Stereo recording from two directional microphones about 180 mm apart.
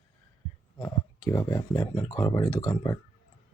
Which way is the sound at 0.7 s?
20° left (ahead or behind).